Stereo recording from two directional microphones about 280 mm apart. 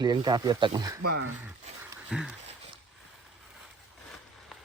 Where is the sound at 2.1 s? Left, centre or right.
Centre.